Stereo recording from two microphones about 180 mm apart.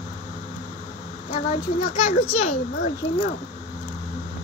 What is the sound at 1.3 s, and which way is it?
Speech, 55° left (ahead or behind).